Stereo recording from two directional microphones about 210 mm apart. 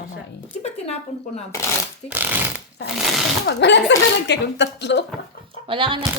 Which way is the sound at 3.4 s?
60° left (ahead or behind).